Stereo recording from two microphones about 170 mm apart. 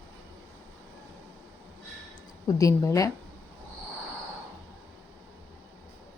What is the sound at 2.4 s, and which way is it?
Speech, 20° left (ahead or behind).